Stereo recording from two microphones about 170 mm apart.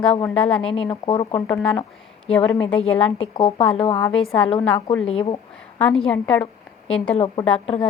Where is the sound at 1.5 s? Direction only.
5° left (ahead or behind).